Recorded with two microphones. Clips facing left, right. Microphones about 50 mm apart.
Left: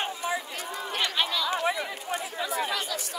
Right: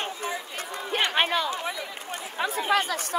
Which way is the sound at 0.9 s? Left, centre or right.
Right.